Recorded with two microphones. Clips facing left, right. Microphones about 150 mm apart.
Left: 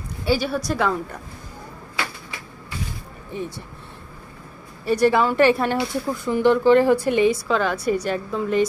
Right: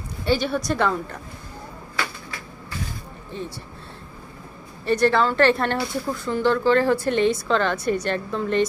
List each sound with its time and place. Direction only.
0.2 s a woman's voice: 5° left (ahead or behind)
3.3 s speech: 20° left (ahead or behind)
4.8 s speech: 10° left (ahead or behind)